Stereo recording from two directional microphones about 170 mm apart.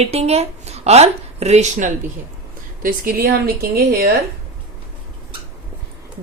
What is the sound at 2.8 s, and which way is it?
A woman's voice, 60° right (ahead or behind).